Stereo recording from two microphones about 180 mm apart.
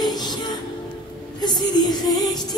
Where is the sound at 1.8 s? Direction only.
20° left (ahead or behind).